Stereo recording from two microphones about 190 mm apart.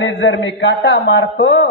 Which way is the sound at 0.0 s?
75° left (ahead or behind).